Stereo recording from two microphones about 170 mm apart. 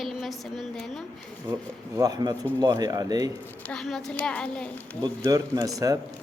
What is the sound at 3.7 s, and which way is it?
Speech, centre (ahead or behind).